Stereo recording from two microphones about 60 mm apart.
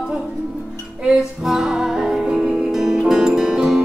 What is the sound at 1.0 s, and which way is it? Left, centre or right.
Music, centre.